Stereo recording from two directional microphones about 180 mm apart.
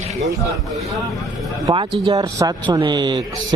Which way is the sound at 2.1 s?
20° right (ahead or behind).